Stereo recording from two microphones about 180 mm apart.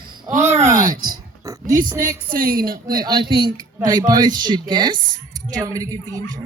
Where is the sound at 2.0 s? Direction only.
50° right (ahead or behind).